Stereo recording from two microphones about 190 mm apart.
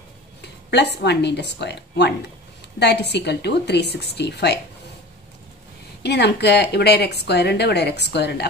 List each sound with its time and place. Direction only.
0.4 s a woman's voice: 60° left (ahead or behind)
6.0 s a woman's voice: 60° left (ahead or behind)